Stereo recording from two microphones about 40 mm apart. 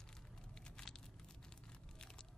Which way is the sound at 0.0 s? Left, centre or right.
Centre.